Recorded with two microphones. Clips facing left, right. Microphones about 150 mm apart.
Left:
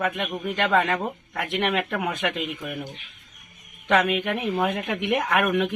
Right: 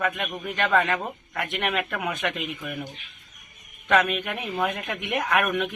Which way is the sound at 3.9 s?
15° left (ahead or behind).